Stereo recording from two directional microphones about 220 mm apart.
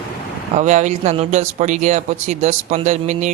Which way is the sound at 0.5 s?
35° right (ahead or behind).